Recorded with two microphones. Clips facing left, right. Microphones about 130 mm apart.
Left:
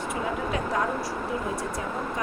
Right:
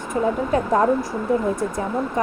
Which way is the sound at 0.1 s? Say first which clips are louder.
Right 10 dB; 45° right (ahead or behind).